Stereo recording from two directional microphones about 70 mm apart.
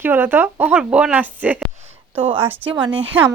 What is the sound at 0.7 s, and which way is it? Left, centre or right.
A woman's voice, centre.